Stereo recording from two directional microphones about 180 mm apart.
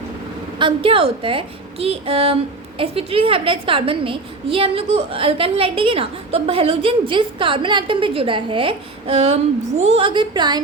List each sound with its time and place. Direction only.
0.6 s a woman's voice: 30° right (ahead or behind)